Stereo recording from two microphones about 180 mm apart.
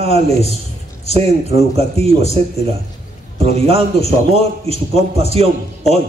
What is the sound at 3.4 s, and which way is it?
A man's voice, 35° right (ahead or behind).